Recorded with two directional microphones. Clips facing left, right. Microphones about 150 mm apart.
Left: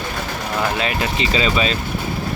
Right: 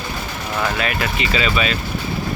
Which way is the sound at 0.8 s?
25° left (ahead or behind).